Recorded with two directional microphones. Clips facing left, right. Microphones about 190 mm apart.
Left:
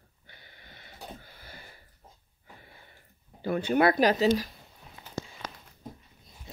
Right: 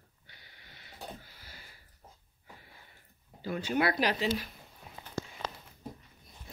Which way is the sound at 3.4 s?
55° left (ahead or behind).